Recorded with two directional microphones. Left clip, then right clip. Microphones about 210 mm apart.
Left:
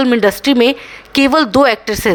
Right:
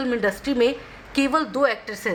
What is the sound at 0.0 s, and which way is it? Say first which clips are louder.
Speech: left 11 dB; 45° left (ahead or behind).